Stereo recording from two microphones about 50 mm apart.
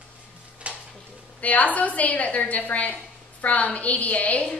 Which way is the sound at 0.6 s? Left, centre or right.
Right.